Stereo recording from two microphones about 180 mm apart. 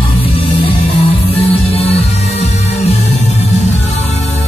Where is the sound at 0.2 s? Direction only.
30° left (ahead or behind).